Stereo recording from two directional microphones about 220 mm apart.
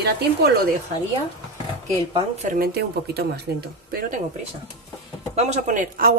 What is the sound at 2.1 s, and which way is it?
Speech, 35° right (ahead or behind).